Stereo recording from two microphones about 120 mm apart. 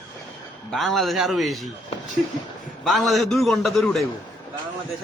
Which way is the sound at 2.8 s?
Centre (ahead or behind).